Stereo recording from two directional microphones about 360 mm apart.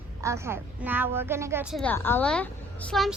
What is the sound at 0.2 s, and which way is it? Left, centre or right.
A woman's voice, centre.